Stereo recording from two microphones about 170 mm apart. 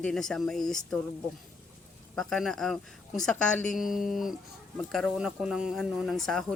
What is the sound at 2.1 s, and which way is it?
Speech, centre (ahead or behind).